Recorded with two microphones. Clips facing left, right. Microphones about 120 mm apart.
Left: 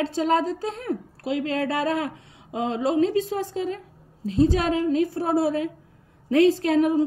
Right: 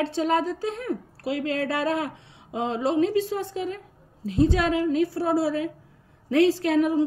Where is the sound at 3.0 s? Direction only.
35° left (ahead or behind).